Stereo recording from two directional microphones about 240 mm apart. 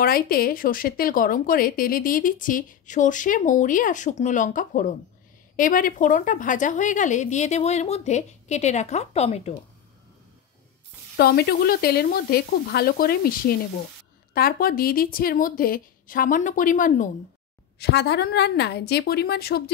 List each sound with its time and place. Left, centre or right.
0.0 s a woman's voice: left
11.1 s speech: left
17.7 s a woman's voice: left